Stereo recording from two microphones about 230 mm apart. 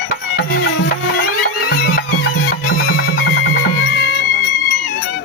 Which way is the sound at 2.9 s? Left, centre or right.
Left.